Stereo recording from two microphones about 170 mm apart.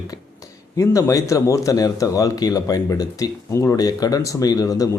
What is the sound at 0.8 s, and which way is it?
Speech, 20° left (ahead or behind).